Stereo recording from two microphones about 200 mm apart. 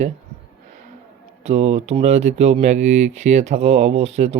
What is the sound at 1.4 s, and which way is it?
Speech, 35° right (ahead or behind).